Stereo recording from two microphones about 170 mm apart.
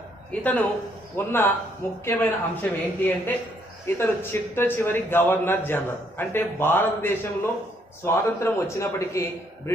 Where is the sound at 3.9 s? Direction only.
15° left (ahead or behind).